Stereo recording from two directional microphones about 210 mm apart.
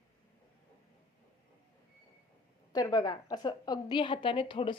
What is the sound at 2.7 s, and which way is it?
A woman's voice, 20° left (ahead or behind).